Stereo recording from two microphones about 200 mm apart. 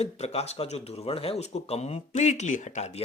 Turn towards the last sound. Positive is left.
turn(degrees=35)  # may be behind; listen again after turning